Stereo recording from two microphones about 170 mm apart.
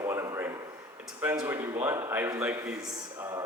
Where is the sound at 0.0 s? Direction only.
20° right (ahead or behind).